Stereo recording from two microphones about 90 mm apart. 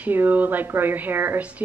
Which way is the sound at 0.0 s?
20° right (ahead or behind).